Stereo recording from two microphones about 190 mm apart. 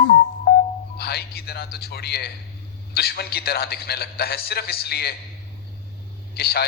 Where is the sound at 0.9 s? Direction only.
55° left (ahead or behind).